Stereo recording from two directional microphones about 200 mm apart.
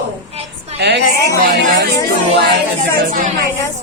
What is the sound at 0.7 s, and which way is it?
Speech, 55° right (ahead or behind).